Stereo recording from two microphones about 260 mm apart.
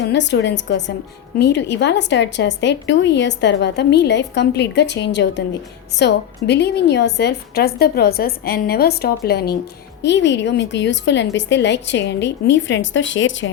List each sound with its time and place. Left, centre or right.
0.0 s a woman's voice: left